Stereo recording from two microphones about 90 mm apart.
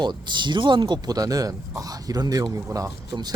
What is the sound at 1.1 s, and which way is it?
Speech, 40° right (ahead or behind).